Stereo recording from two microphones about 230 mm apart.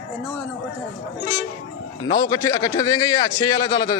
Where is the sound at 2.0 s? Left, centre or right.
Centre.